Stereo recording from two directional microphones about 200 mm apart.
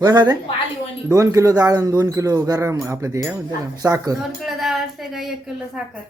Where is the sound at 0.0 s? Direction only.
20° right (ahead or behind).